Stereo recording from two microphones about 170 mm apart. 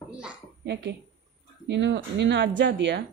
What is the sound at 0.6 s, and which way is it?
Speech, 90° right.